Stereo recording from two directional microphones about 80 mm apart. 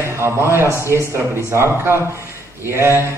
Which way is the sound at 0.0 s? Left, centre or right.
Right.